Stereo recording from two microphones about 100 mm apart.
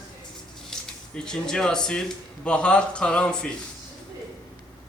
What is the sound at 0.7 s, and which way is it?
Speech, 5° left (ahead or behind).